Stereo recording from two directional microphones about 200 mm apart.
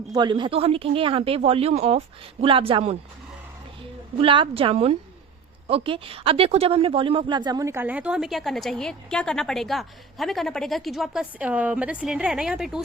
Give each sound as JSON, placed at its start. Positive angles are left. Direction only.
{"t": 0.1, "sound": "speech", "side_deg": -20}
{"t": 4.2, "sound": "speech", "side_deg": -25}